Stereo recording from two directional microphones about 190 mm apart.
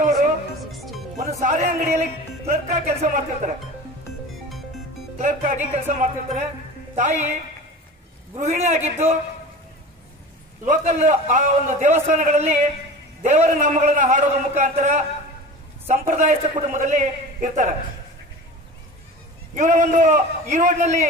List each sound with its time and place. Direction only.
0.0 s music: 40° right (ahead or behind)
1.4 s music: 35° right (ahead or behind)
5.2 s music: 35° right (ahead or behind)
8.4 s music: 35° right (ahead or behind)
10.6 s music: 40° right (ahead or behind)
19.5 s music: 40° right (ahead or behind)